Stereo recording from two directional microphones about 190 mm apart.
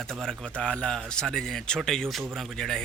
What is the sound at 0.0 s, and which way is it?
Speech, centre (ahead or behind).